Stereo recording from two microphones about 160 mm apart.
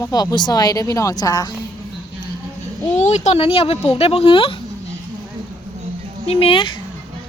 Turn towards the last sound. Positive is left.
turn(degrees=30)  # may be behind; listen again after turning